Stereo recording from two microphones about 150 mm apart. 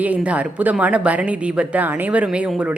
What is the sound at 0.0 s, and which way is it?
Speech, 10° right (ahead or behind).